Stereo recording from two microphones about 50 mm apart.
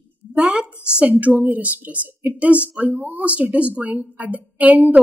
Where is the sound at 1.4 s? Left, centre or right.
Right.